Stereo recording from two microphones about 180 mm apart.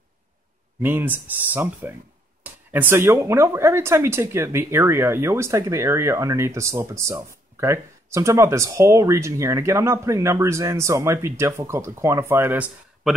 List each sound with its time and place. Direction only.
0.8 s speech: 10° right (ahead or behind)
13.0 s speech: centre (ahead or behind)